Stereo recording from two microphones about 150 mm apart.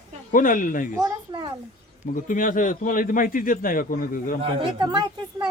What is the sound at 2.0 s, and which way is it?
A man's voice, 60° left (ahead or behind).